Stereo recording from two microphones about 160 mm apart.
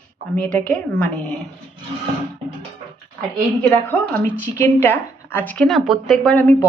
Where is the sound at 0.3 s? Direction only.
5° left (ahead or behind).